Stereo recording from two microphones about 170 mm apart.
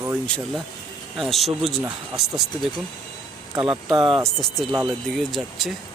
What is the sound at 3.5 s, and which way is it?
Speech, 25° right (ahead or behind).